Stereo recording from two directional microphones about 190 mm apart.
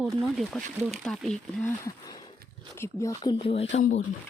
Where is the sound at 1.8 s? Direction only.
20° left (ahead or behind).